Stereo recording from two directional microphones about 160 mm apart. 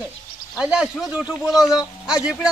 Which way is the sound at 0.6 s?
5° right (ahead or behind).